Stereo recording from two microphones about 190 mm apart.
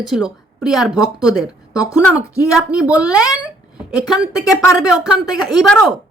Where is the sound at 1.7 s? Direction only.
20° left (ahead or behind).